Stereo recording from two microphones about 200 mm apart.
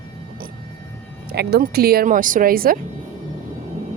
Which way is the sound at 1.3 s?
55° right (ahead or behind).